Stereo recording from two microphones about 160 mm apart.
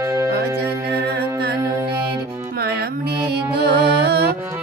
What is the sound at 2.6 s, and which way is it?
Music, 75° right (ahead or behind).